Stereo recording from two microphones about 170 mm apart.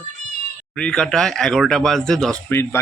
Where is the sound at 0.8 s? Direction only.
5° left (ahead or behind).